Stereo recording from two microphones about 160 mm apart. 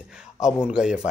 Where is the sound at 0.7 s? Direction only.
5° right (ahead or behind).